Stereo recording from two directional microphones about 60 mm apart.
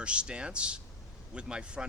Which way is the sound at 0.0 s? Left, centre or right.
Centre.